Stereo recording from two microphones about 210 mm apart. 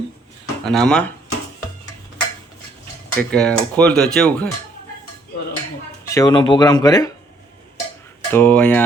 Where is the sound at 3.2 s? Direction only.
5° left (ahead or behind).